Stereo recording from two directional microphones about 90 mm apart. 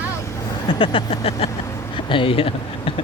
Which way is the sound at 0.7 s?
70° left (ahead or behind).